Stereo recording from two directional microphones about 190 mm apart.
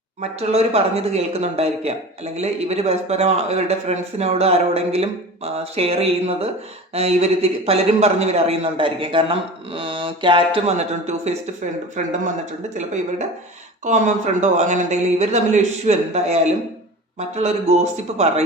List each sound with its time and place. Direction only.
0.2 s speech: 35° right (ahead or behind)